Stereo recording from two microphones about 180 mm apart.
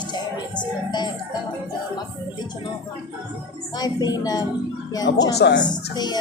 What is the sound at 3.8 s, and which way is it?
A woman's voice, 20° left (ahead or behind).